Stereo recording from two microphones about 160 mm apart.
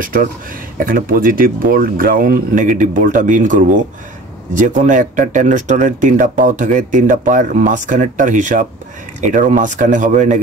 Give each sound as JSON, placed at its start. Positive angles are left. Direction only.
{"t": 0.0, "sound": "speech", "side_deg": -60}